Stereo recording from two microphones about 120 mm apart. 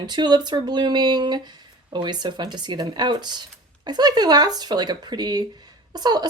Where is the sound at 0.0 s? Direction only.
40° right (ahead or behind).